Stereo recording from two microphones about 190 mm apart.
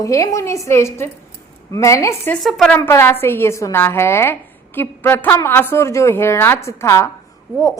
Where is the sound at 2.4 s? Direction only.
Centre (ahead or behind).